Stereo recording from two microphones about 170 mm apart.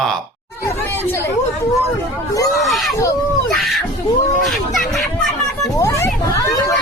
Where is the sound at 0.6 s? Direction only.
15° left (ahead or behind).